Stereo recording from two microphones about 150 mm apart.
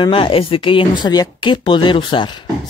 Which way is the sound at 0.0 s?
35° left (ahead or behind).